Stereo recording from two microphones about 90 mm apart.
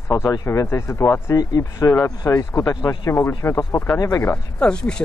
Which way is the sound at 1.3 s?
35° left (ahead or behind).